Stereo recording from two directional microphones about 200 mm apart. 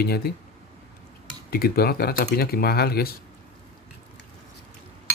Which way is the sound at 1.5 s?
50° left (ahead or behind).